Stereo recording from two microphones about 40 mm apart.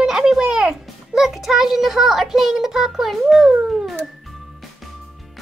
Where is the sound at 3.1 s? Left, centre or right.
Centre.